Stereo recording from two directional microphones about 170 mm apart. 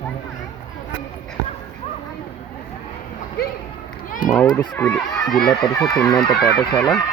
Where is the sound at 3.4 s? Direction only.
65° left (ahead or behind).